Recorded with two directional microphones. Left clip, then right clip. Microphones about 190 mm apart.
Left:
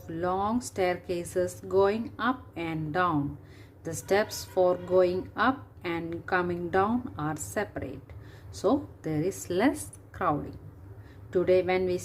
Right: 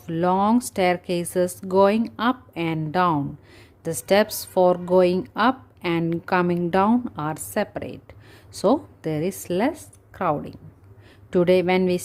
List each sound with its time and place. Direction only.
0.0 s speech: 35° right (ahead or behind)